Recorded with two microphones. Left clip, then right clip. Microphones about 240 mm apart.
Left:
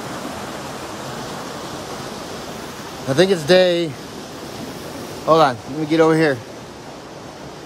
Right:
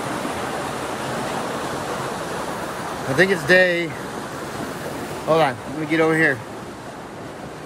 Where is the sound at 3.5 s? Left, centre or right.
Left.